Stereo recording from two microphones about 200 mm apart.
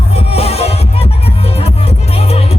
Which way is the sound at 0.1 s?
30° left (ahead or behind).